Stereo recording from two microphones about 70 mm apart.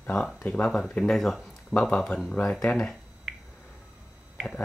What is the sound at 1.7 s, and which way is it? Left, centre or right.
Speech, centre.